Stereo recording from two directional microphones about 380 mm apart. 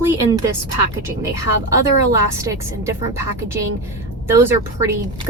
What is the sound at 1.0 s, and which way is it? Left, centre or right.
Speech, centre.